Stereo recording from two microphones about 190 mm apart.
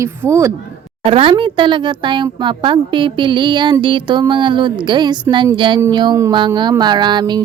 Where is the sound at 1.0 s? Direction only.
30° right (ahead or behind).